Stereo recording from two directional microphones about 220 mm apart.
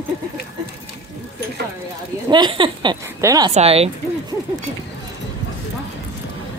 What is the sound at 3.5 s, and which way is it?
Speech, 30° right (ahead or behind).